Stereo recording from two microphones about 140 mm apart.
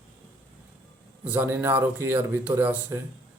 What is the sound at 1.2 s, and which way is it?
A man's voice, 10° right (ahead or behind).